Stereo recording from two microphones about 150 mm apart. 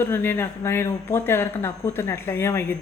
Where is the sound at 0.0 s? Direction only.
15° left (ahead or behind).